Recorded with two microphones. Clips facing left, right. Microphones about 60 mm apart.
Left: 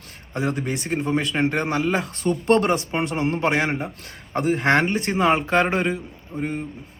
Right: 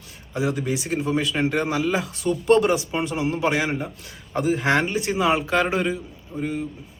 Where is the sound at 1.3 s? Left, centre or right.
Centre.